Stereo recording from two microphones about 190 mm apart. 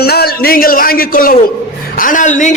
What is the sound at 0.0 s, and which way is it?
A man's voice, 55° left (ahead or behind).